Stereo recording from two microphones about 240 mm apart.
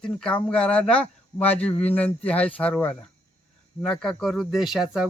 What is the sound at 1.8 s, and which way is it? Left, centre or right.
Speech, centre.